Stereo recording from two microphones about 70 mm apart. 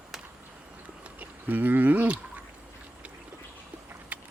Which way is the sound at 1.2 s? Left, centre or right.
Right.